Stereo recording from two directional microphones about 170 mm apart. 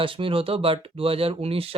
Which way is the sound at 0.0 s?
30° right (ahead or behind).